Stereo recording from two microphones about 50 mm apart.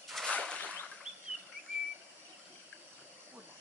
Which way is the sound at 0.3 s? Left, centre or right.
Centre.